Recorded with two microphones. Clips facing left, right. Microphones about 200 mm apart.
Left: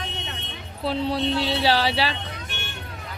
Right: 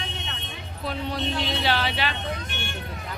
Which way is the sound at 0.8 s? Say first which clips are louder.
Left 5 dB; 30° left (ahead or behind).